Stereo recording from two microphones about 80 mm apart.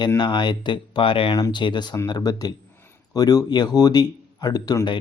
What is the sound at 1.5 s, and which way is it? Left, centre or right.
Speech, left.